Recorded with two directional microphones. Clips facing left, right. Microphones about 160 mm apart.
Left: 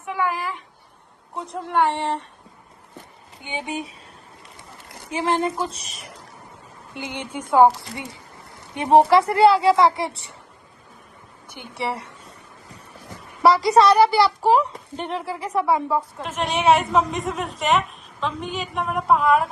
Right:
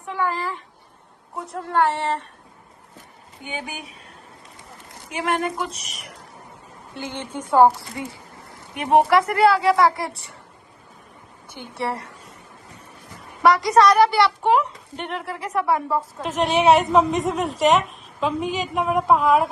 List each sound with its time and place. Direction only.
0.0 s a sound: 10° left (ahead or behind)
1.4 s speech: 15° left (ahead or behind)
3.4 s a woman's voice: 20° left (ahead or behind)
5.1 s a woman's voice: 30° left (ahead or behind)
6.9 s a woman's voice: 15° left (ahead or behind)
13.4 s a woman's voice: 30° left (ahead or behind)
14.1 s a woman's voice: centre (ahead or behind)
14.5 s a woman's voice: 35° left (ahead or behind)
15.6 s a woman's voice: centre (ahead or behind)